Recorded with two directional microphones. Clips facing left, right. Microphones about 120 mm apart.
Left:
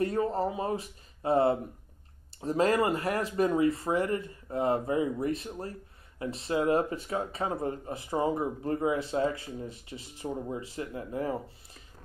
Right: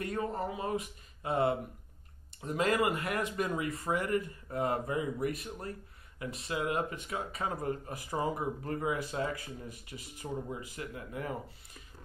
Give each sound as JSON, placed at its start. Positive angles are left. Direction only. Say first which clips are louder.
{"t": 0.0, "sound": "speech", "louder": "left 6 dB", "side_deg": 30}